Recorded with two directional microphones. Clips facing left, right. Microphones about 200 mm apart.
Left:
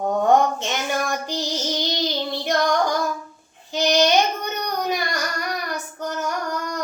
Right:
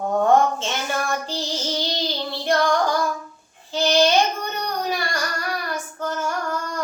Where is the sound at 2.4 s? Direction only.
15° left (ahead or behind).